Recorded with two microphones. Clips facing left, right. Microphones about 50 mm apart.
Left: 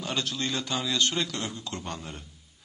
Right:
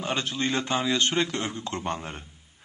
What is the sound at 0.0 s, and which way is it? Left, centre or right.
A man's voice, right.